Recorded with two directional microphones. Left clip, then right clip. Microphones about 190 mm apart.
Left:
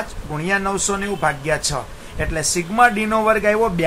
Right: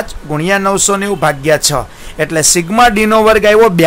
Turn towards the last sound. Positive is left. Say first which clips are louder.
# right 9 dB
turn(degrees=-55)  # may be behind; listen again after turning